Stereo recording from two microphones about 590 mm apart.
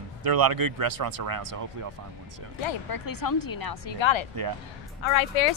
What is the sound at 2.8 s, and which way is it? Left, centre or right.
Speech, left.